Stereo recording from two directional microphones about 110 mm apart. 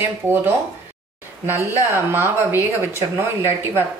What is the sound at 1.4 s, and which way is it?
A woman's voice, 25° right (ahead or behind).